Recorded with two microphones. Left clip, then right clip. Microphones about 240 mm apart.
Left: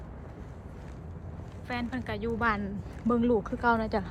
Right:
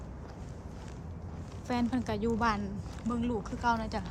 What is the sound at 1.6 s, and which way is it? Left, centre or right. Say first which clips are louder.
A woman's voice: right 2 dB; centre.